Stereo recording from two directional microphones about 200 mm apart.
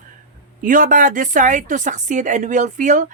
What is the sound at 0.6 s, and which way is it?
A woman's voice, 40° right (ahead or behind).